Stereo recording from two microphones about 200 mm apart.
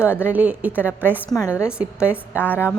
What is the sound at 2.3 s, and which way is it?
Speech, 10° left (ahead or behind).